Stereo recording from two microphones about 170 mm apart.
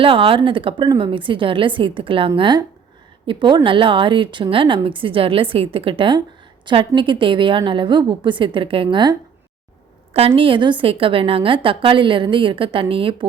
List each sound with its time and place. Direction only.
0.0 s a woman's voice: 30° right (ahead or behind)